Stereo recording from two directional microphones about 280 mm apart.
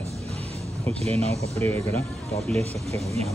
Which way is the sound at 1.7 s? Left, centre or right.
Centre.